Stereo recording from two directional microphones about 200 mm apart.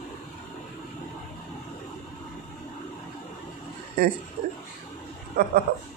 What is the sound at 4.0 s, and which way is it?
Speech, 50° right (ahead or behind).